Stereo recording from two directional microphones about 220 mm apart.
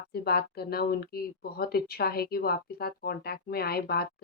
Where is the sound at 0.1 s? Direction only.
45° left (ahead or behind).